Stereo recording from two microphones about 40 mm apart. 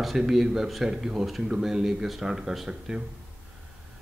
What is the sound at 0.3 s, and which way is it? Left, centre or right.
Speech, centre.